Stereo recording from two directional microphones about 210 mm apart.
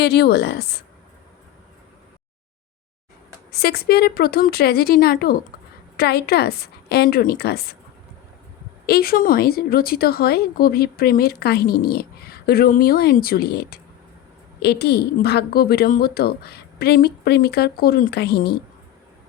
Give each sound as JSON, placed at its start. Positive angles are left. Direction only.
{"t": 0.0, "sound": "a woman's voice", "side_deg": 55}
{"t": 3.5, "sound": "a woman's voice", "side_deg": 50}
{"t": 8.9, "sound": "a woman's voice", "side_deg": 45}